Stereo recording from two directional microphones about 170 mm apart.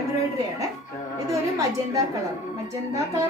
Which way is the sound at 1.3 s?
20° right (ahead or behind).